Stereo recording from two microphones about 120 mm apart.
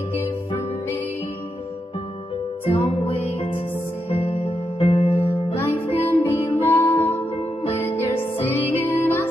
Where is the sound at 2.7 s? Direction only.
55° left (ahead or behind).